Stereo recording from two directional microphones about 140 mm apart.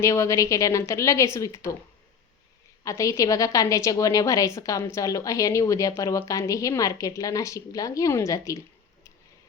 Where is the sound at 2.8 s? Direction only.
20° left (ahead or behind).